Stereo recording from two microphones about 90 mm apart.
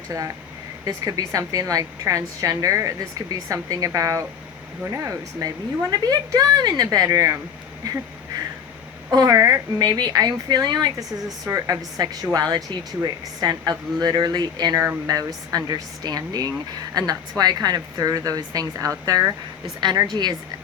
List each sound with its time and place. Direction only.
0.9 s a woman's voice: 40° right (ahead or behind)
9.1 s speech: 40° right (ahead or behind)
11.4 s speech: 35° right (ahead or behind)
19.8 s speech: 55° right (ahead or behind)